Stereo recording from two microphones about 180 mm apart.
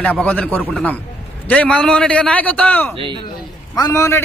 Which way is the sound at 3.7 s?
20° left (ahead or behind).